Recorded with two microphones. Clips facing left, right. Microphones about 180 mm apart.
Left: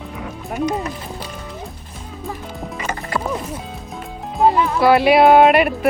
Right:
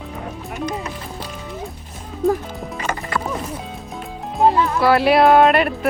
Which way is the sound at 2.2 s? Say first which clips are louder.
Right 13 dB; centre (ahead or behind).